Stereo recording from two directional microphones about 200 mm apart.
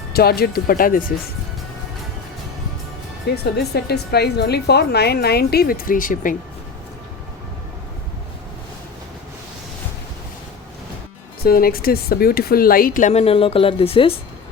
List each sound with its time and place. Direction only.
0.1 s a woman's voice: 50° left (ahead or behind)
3.3 s a woman's voice: 55° left (ahead or behind)
11.4 s a woman's voice: 50° left (ahead or behind); by 14.1 s 25° left (ahead or behind)